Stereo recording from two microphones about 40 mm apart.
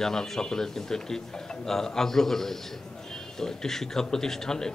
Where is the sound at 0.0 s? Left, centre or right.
Centre.